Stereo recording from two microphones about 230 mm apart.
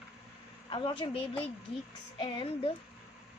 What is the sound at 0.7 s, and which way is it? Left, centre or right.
A woman's voice, left.